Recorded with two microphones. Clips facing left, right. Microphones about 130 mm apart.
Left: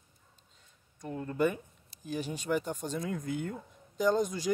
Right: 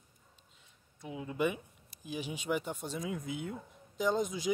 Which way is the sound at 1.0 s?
5° right (ahead or behind).